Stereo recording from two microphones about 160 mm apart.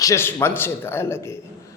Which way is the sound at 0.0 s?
15° left (ahead or behind).